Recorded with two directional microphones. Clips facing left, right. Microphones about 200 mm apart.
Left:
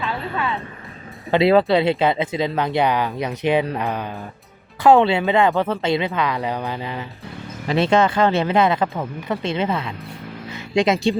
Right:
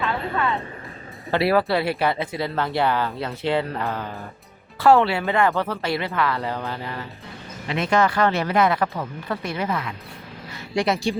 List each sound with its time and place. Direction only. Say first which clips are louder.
1.3 s speech: left 5 dB; 20° left (ahead or behind)
7.7 s speech: left 4 dB; 30° left (ahead or behind)